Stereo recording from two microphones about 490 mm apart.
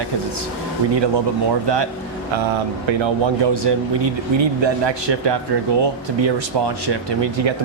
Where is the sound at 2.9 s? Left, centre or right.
Right.